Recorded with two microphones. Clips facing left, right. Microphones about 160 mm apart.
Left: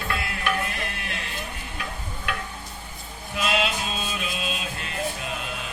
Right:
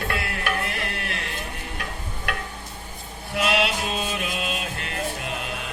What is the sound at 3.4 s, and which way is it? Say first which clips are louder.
Music: right 2 dB; 65° right (ahead or behind).